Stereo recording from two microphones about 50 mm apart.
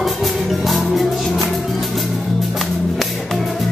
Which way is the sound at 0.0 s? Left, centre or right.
Centre.